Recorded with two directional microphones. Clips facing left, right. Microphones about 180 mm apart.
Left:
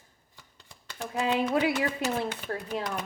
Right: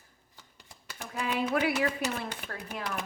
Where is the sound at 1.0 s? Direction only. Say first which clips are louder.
Left 4 dB; 20° left (ahead or behind).